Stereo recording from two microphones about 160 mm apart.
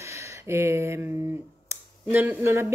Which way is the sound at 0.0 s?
15° right (ahead or behind).